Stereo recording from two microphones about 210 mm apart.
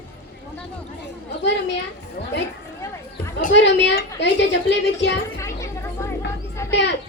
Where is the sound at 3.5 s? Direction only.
60° left (ahead or behind).